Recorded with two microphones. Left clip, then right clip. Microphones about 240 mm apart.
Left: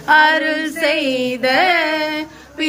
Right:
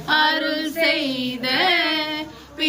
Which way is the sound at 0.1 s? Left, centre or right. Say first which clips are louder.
Left 7 dB; centre.